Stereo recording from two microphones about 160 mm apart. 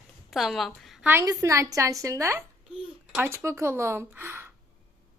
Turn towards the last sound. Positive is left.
turn(degrees=-15)  # may be behind; listen again after turning